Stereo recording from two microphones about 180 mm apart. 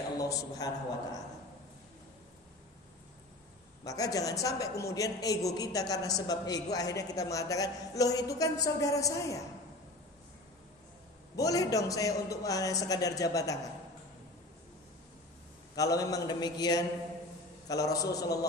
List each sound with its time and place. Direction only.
0.2 s a man's voice: 20° left (ahead or behind)
3.8 s a man's voice: 20° left (ahead or behind)
11.3 s a man's voice: 20° left (ahead or behind)
15.7 s a man's voice: 20° left (ahead or behind)